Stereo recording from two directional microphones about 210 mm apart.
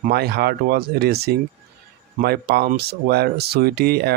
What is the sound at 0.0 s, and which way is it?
Speech, 50° right (ahead or behind).